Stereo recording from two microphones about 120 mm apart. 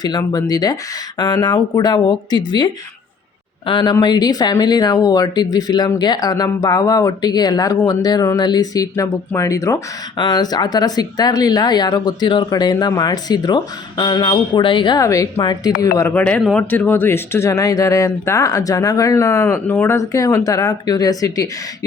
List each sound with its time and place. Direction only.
0.0 s speech: 35° left (ahead or behind)
15.0 s speech: 30° left (ahead or behind)
16.1 s speech: 10° left (ahead or behind)
16.4 s speech: centre (ahead or behind)
16.6 s speech: 15° left (ahead or behind)